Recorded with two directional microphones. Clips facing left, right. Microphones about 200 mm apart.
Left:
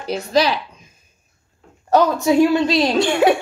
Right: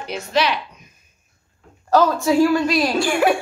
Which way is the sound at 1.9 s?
20° left (ahead or behind).